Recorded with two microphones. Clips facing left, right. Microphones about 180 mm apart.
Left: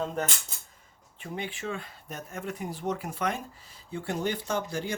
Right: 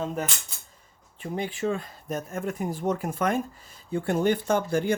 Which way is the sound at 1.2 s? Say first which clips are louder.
Right 7 dB; 40° right (ahead or behind).